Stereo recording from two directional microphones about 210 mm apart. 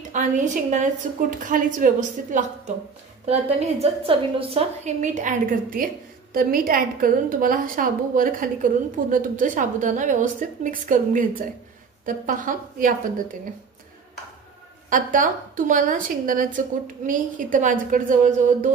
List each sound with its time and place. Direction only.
0.1 s a woman's voice: 35° right (ahead or behind)
14.9 s a woman's voice: 40° right (ahead or behind)